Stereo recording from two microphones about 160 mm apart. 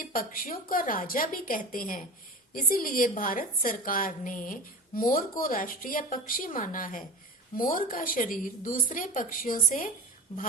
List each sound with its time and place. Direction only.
0.0 s a woman's voice: 60° left (ahead or behind)